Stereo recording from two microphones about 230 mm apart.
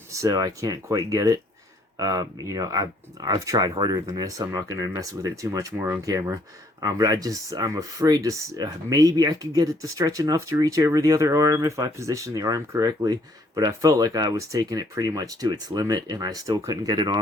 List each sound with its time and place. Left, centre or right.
0.1 s speech: centre